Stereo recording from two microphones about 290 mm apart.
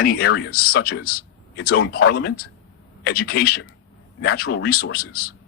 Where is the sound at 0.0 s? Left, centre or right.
Left.